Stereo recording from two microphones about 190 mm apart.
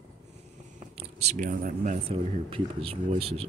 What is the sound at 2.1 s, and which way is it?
Speech, 30° right (ahead or behind).